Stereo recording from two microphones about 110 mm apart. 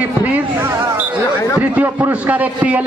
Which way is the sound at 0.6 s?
20° right (ahead or behind).